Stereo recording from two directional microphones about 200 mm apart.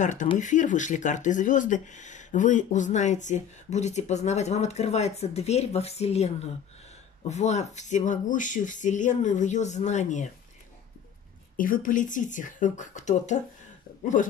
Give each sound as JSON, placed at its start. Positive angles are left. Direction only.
{"t": 0.0, "sound": "speech", "side_deg": 40}
{"t": 11.5, "sound": "speech", "side_deg": 45}